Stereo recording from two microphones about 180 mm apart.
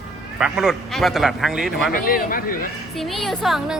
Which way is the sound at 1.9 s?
50° left (ahead or behind).